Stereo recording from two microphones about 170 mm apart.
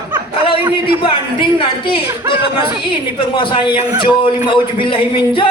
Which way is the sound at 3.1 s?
30° left (ahead or behind).